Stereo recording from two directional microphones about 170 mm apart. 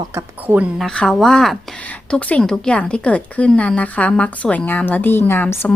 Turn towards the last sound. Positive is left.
turn(degrees=10)  # may be behind; listen again after turning